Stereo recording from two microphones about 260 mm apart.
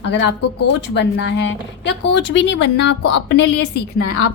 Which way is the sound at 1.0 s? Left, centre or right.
Left.